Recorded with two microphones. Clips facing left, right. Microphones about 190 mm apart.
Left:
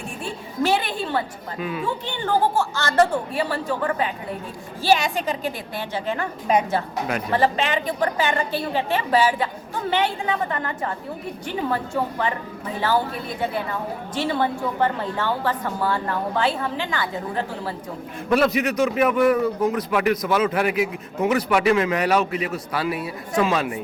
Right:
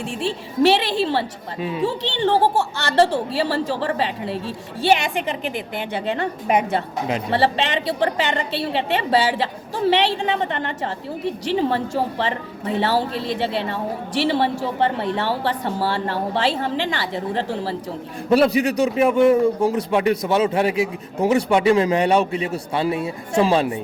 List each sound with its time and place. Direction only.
0.0 s a woman's voice: 85° right
1.0 s a man's voice: 30° right (ahead or behind)
1.9 s a woman's voice: 80° right
2.4 s speech: 65° right (ahead or behind)
3.3 s a woman's voice: 30° right (ahead or behind)
4.3 s a woman's voice: 90° right
6.5 s speech: 60° right (ahead or behind)
6.7 s a man's voice: 25° right (ahead or behind)
9.9 s a woman's voice: 75° right (ahead or behind)
10.2 s a man's voice: 25° right (ahead or behind)
13.0 s a woman's voice: 90° right
14.3 s a man's voice: 30° right (ahead or behind)